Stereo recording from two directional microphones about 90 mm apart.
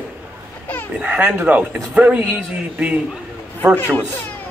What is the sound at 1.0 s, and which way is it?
A man's voice, 15° right (ahead or behind).